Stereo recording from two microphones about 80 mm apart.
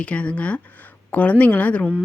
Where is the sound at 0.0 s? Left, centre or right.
Centre.